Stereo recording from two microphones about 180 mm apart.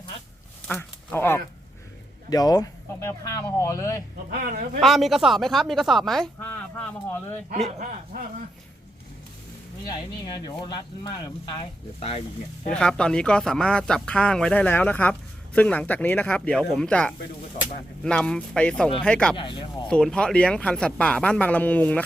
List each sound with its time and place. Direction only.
0.7 s speech: 10° left (ahead or behind)
4.3 s speech: 55° right (ahead or behind)
4.8 s speech: centre (ahead or behind)
7.8 s speech: 50° right (ahead or behind)
9.8 s speech: 20° left (ahead or behind)
11.9 s speech: 35° left (ahead or behind)
12.7 s speech: 5° left (ahead or behind)
19.4 s speech: 25° left (ahead or behind)
19.9 s speech: 5° left (ahead or behind)